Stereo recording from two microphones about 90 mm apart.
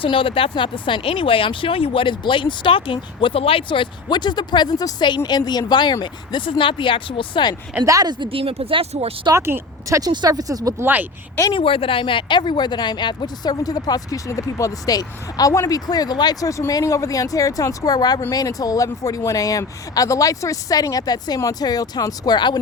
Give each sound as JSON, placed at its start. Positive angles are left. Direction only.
{"t": 0.0, "sound": "speech", "side_deg": 75}
{"t": 7.9, "sound": "speech", "side_deg": -40}
{"t": 8.2, "sound": "speech", "side_deg": -90}
{"t": 9.3, "sound": "speech", "side_deg": -35}
{"t": 10.1, "sound": "speech", "side_deg": -50}
{"t": 10.8, "sound": "speech", "side_deg": -20}
{"t": 11.5, "sound": "speech", "side_deg": 80}